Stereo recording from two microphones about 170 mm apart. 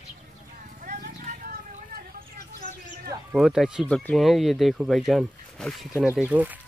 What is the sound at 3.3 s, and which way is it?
Speech, 5° right (ahead or behind).